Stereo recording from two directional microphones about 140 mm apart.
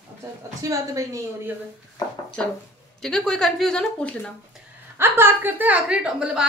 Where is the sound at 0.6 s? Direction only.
25° right (ahead or behind).